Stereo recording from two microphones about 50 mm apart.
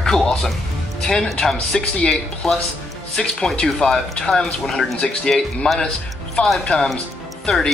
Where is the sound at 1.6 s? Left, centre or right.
Centre.